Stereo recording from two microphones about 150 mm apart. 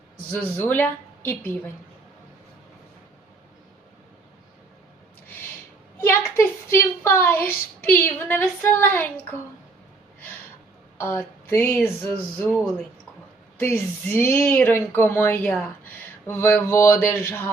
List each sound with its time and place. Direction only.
0.3 s speech: 10° left (ahead or behind)
6.0 s a sound: 15° left (ahead or behind)
10.9 s a woman's voice: 15° left (ahead or behind)
13.6 s speech: 15° left (ahead or behind)